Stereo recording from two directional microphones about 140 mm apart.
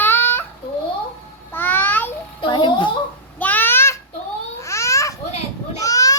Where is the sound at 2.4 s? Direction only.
35° left (ahead or behind).